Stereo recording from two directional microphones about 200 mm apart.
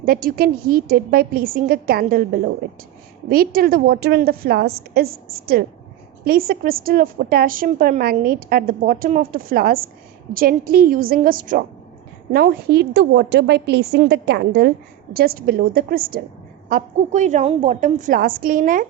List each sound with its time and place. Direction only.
0.0 s a woman's voice: 45° right (ahead or behind)